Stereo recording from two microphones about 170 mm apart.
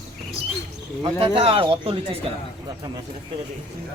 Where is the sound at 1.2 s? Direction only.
35° right (ahead or behind).